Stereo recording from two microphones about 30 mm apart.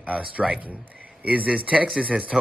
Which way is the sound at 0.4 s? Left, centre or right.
Centre.